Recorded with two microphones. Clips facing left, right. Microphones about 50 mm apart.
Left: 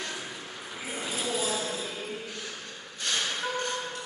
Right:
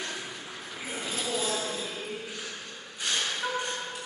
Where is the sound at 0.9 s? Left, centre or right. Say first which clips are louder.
Left 1 dB; centre.